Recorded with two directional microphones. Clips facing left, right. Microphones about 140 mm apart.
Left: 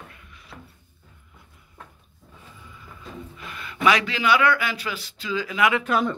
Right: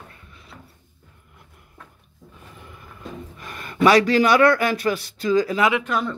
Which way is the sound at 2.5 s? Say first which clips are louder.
Right 4 dB; 65° right (ahead or behind).